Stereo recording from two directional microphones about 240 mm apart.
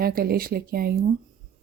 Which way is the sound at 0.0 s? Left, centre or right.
Right.